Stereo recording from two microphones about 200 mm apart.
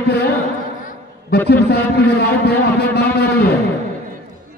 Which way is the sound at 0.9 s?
55° left (ahead or behind).